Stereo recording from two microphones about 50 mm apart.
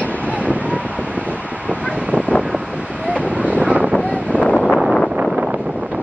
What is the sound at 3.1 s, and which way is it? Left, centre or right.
Wind noise, right.